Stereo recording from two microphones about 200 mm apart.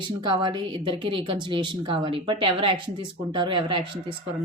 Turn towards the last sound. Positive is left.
turn(degrees=-25)  # may be behind; listen again after turning